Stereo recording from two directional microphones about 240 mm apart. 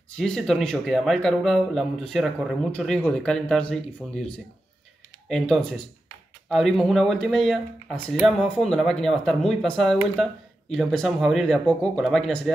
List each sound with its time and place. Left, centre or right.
0.2 s speech: centre
5.3 s speech: centre